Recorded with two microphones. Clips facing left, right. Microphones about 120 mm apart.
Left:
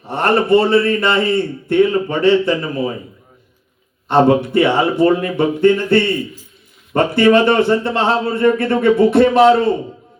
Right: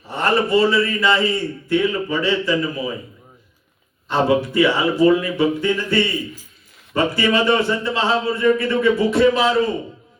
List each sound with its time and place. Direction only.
0.0 s a man's voice: 55° left (ahead or behind)
4.1 s a man's voice: 55° left (ahead or behind)